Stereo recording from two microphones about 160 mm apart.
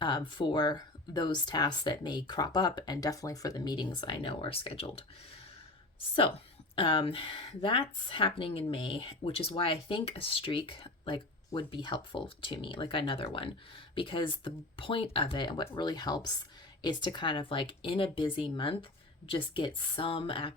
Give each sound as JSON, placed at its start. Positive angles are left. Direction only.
{"t": 0.0, "sound": "speech", "side_deg": 30}
{"t": 6.7, "sound": "a woman's voice", "side_deg": 35}